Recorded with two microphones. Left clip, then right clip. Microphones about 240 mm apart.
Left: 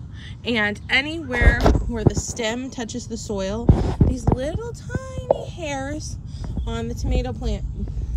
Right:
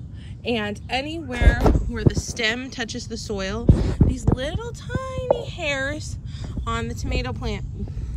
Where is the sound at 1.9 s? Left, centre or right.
Centre.